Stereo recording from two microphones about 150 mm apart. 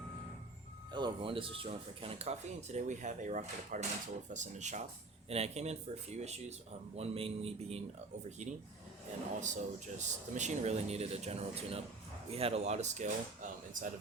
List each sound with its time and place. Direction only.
0.9 s speech: 35° right (ahead or behind)
9.4 s speech: 55° right (ahead or behind)